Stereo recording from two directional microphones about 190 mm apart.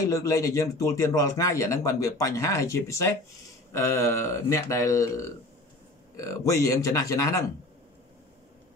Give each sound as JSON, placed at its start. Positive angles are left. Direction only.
{"t": 0.0, "sound": "speech", "side_deg": 15}